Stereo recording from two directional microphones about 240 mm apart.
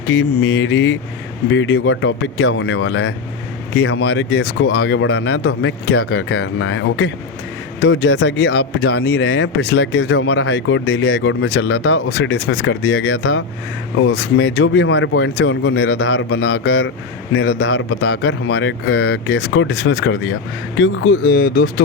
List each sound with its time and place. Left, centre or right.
0.1 s speech: left
5.9 s speech: left
6.3 s speech: left
18.1 s speech: left